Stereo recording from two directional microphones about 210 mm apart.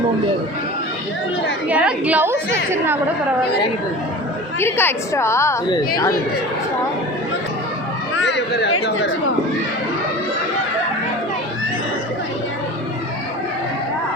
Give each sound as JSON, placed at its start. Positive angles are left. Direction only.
{"t": 1.7, "sound": "a woman's voice", "side_deg": -5}
{"t": 4.6, "sound": "a woman's voice", "side_deg": 10}
{"t": 8.2, "sound": "speech", "side_deg": 55}